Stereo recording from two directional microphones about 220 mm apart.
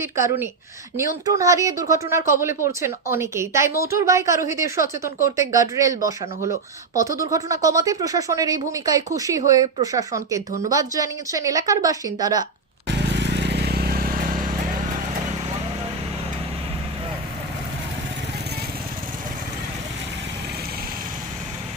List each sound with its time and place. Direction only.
0.0 s speech: 10° right (ahead or behind)
13.1 s vehicle: 50° right (ahead or behind)